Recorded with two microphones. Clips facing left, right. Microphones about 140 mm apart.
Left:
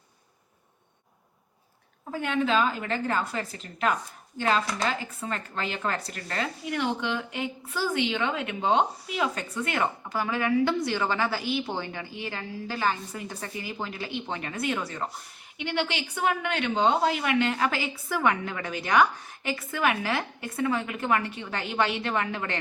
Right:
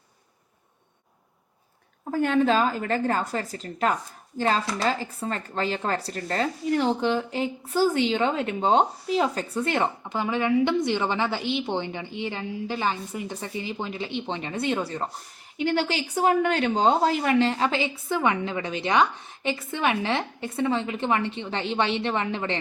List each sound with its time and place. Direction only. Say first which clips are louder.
2.0 s a woman's voice: right 5 dB; 45° right (ahead or behind); by 22.5 s 25° right (ahead or behind)